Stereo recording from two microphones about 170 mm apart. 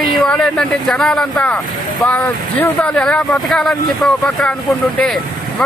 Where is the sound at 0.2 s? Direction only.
5° left (ahead or behind).